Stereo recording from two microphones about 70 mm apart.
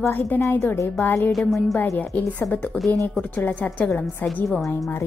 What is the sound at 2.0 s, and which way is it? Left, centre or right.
A woman's voice, left.